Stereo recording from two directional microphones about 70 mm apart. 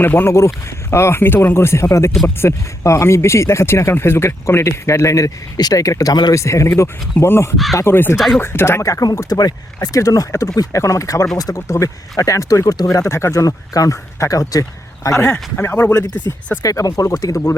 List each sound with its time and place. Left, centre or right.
0.0 s speech: left
0.3 s speech: left
6.3 s speech: left
7.5 s speech: centre
7.8 s speech: left
8.1 s speech: centre
8.4 s speech: left
8.8 s speech: left
10.0 s speech: left
13.4 s speech: left
15.5 s speech: left
16.6 s speech: left